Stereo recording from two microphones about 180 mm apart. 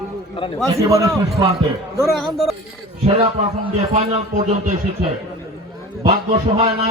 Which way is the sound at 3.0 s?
35° right (ahead or behind).